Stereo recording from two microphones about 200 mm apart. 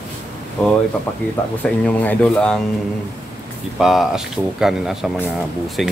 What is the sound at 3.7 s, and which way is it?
Speech, centre (ahead or behind).